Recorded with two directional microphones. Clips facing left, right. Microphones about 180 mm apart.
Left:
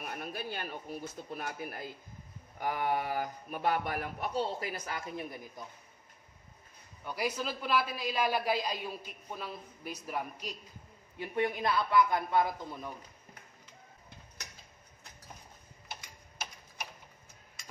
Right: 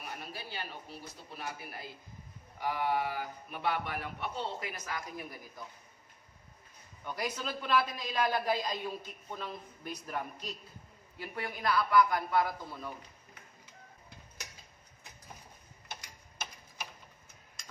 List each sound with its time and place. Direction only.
0.0 s speech: 50° left (ahead or behind); by 5.7 s 25° left (ahead or behind)
7.1 s a man's voice: 10° left (ahead or behind)
11.1 s a man's voice: 20° left (ahead or behind)